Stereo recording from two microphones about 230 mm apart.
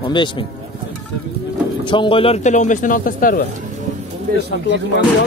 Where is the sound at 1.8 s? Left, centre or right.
Left.